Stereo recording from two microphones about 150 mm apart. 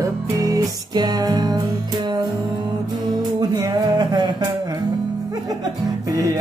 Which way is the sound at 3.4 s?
25° right (ahead or behind).